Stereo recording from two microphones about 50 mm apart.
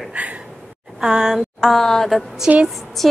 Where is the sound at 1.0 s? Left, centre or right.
Centre.